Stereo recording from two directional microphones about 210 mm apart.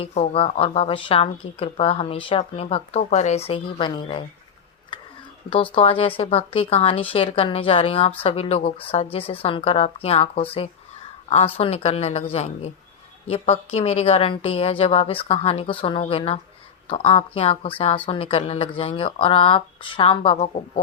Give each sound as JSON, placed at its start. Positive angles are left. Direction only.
{"t": 0.0, "sound": "speech", "side_deg": 30}
{"t": 5.7, "sound": "speech", "side_deg": 25}